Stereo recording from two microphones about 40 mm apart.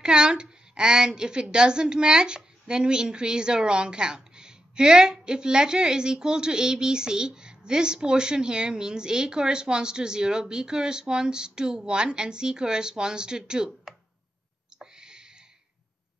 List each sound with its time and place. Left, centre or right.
0.0 s a woman's voice: right
14.8 s owl: centre